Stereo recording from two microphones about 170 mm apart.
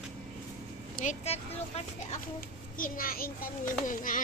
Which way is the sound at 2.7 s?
55° left (ahead or behind).